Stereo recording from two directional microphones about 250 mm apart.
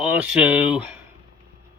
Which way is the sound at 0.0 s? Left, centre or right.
Centre.